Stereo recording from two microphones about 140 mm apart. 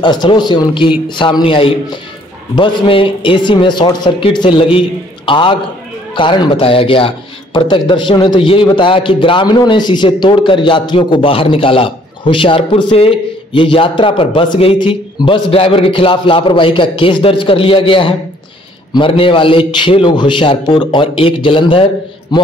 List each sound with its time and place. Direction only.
0.0 s a man's voice: 30° left (ahead or behind)